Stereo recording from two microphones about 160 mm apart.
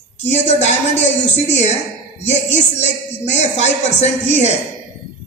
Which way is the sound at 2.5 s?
45° left (ahead or behind).